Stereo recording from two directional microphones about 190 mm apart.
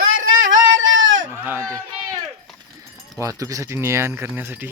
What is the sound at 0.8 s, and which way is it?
Goat, 90° right.